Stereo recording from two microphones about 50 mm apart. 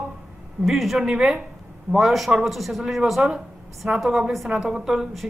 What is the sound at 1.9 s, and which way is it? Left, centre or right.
Speech, centre.